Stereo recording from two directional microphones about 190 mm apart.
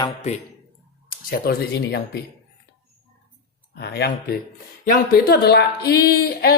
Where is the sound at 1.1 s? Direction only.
50° left (ahead or behind).